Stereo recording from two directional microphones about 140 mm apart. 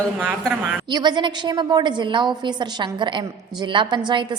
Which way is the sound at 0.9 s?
30° right (ahead or behind).